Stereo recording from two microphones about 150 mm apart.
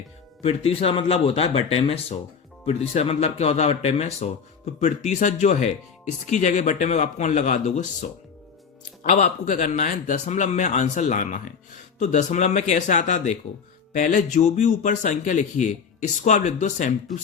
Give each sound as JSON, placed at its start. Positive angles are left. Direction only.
{"t": 0.4, "sound": "a man's voice", "side_deg": 40}